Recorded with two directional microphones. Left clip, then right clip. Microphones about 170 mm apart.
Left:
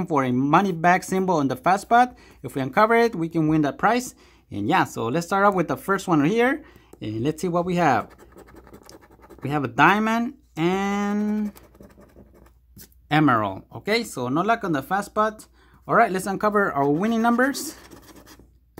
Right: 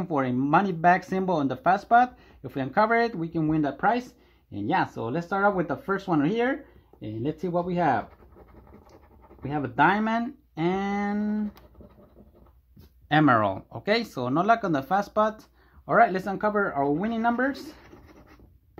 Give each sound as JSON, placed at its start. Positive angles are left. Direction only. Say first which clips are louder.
{"t": 0.0, "sound": "speech", "louder": "left 4 dB", "side_deg": 30}
{"t": 9.4, "sound": "speech", "louder": "left 4 dB", "side_deg": 35}
{"t": 13.1, "sound": "speech", "louder": "left 1 dB", "side_deg": 20}
{"t": 15.8, "sound": "speech", "louder": "left 1 dB", "side_deg": 30}